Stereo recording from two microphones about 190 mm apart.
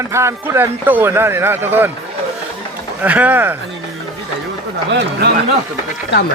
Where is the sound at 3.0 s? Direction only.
10° right (ahead or behind).